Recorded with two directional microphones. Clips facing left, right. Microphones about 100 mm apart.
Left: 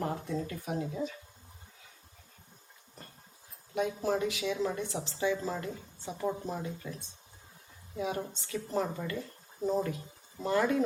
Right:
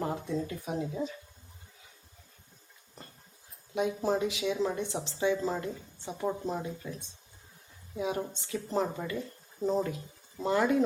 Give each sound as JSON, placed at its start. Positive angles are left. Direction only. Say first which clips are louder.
{"t": 0.0, "sound": "speech", "louder": "right 1 dB", "side_deg": -15}
{"t": 3.8, "sound": "speech", "louder": "right 2 dB", "side_deg": -20}
{"t": 7.9, "sound": "a woman's voice", "louder": "right 2 dB", "side_deg": -15}
{"t": 9.6, "sound": "speech", "louder": "right 1 dB", "side_deg": -5}
{"t": 10.4, "sound": "a woman's voice", "louder": "right 2 dB", "side_deg": -20}